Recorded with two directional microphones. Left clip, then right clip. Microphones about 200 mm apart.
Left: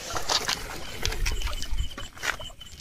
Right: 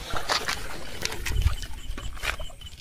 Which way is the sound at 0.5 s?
Centre (ahead or behind).